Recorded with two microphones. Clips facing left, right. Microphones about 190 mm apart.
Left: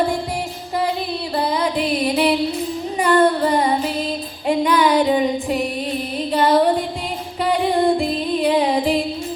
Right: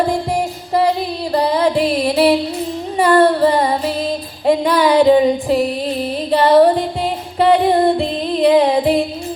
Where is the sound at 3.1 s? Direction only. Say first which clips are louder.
Right 3 dB; 30° right (ahead or behind).